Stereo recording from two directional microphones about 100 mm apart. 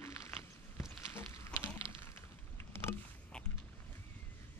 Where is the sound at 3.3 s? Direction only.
10° left (ahead or behind).